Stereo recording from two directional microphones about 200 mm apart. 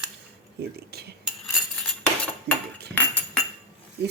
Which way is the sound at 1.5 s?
5° left (ahead or behind).